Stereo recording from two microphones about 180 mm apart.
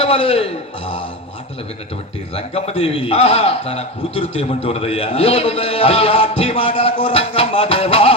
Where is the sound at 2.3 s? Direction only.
35° left (ahead or behind).